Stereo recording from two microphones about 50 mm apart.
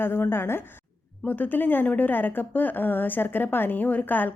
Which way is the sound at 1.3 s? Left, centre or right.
Left.